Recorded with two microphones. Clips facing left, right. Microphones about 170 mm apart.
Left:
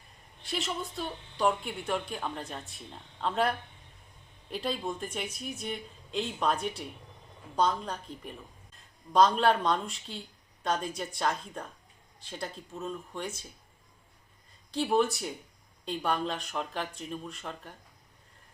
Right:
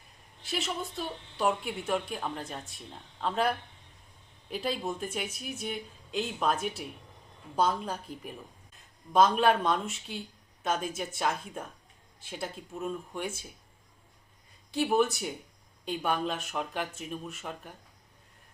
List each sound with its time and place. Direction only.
0.4 s speech: centre (ahead or behind)
14.7 s speech: 5° right (ahead or behind)